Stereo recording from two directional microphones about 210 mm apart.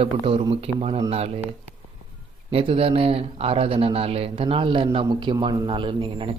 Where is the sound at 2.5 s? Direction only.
25° right (ahead or behind).